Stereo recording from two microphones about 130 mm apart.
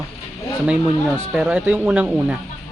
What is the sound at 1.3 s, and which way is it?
Speech, 10° right (ahead or behind).